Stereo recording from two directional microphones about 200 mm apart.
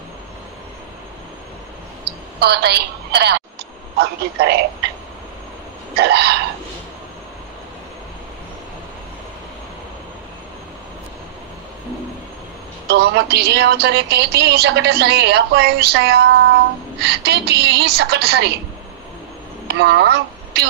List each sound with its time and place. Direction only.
2.4 s a woman's voice: 55° right (ahead or behind)
5.9 s a woman's voice: 55° right (ahead or behind)
12.8 s a woman's voice: 55° right (ahead or behind)
19.7 s speech: 55° right (ahead or behind)